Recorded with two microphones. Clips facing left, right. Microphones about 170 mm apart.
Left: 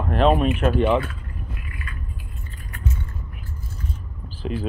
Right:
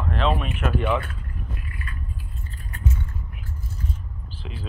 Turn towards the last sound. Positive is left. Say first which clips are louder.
# left 11 dB
turn(degrees=45)  # may be behind; listen again after turning